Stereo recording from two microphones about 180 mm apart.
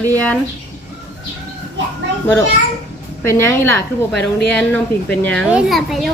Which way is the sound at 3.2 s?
15° left (ahead or behind).